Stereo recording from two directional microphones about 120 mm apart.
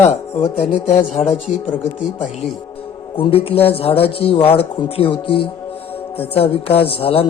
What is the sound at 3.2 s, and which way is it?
Speech, 50° left (ahead or behind).